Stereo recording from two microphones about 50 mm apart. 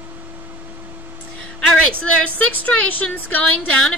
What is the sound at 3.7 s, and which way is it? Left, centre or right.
Speech, centre.